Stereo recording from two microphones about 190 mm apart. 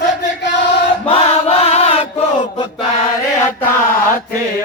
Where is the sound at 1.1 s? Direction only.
30° left (ahead or behind).